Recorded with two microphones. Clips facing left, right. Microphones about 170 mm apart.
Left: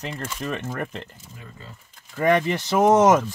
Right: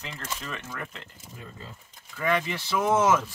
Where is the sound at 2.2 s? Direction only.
55° left (ahead or behind).